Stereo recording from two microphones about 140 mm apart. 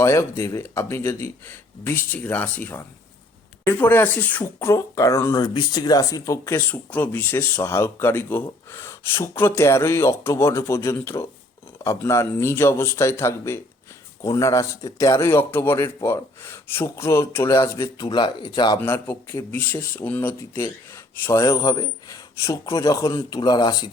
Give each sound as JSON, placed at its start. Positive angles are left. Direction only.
{"t": 0.0, "sound": "speech", "side_deg": 20}
{"t": 18.8, "sound": "speech", "side_deg": 15}